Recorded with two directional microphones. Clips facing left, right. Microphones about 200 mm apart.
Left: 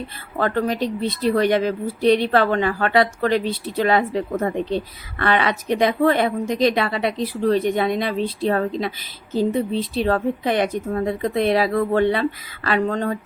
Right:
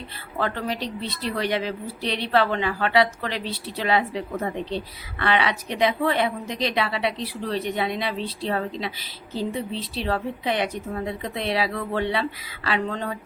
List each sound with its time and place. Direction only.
0.3 s speech: 50° left (ahead or behind)